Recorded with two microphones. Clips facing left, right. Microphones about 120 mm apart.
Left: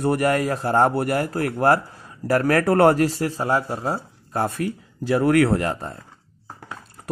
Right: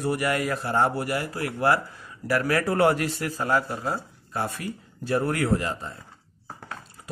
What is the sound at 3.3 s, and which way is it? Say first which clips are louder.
Speech: left 3 dB; 25° left (ahead or behind).